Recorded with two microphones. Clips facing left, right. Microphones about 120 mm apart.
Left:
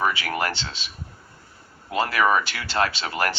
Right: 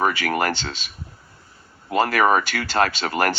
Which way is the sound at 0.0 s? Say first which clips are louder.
Right 3 dB; 50° right (ahead or behind).